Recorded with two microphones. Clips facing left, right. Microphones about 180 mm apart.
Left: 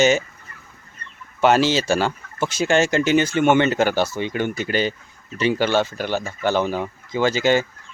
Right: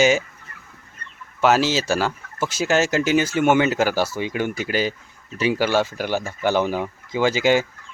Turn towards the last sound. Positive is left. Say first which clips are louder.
# even
turn(degrees=-10)  # may be behind; listen again after turning